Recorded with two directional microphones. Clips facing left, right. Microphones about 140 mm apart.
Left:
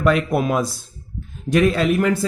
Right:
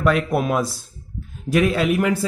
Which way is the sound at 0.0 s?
Centre (ahead or behind).